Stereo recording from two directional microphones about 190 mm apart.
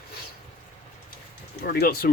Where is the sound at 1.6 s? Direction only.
55° left (ahead or behind).